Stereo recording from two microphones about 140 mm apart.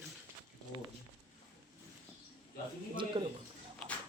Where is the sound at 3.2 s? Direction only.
40° right (ahead or behind).